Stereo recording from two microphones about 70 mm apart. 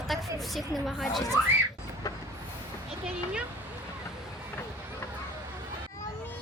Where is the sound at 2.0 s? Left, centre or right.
Left.